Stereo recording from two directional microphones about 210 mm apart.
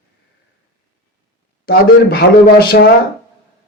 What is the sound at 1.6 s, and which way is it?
Speech, 45° left (ahead or behind).